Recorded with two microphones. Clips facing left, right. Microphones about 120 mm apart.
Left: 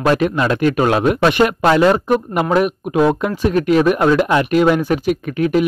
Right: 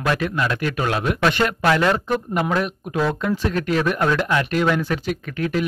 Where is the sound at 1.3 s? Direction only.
15° left (ahead or behind).